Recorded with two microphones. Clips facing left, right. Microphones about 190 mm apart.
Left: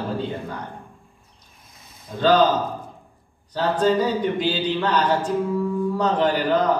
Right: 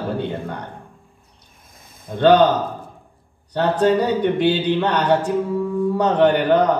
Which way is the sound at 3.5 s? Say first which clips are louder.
Right 3 dB; 65° right (ahead or behind).